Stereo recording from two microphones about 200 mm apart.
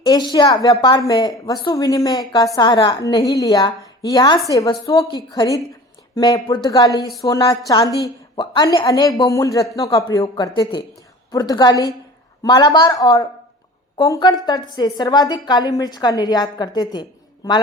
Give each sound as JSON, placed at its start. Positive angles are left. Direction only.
{"t": 0.0, "sound": "a woman's voice", "side_deg": 20}